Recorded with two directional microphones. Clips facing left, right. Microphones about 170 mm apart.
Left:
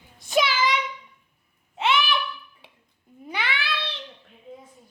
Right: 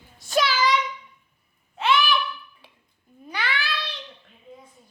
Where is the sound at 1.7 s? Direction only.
25° left (ahead or behind).